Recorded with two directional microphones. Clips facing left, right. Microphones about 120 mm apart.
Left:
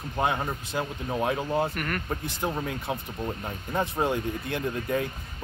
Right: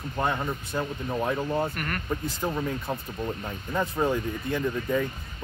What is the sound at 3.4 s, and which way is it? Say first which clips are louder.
Speech: left 2 dB; 15° left (ahead or behind).